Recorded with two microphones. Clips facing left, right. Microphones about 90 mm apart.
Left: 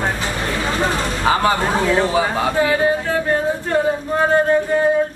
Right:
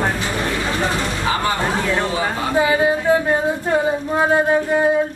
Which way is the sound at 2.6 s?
15° right (ahead or behind).